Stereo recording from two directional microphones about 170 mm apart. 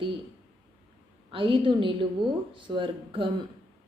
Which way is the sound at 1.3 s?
30° right (ahead or behind).